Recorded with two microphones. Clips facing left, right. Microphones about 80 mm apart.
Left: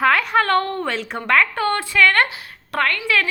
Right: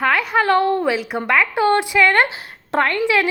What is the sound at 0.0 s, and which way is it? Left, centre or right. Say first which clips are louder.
A woman's voice: even; centre.